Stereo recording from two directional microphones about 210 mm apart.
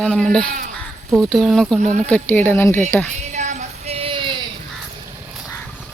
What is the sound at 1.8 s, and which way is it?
Speech, 35° right (ahead or behind).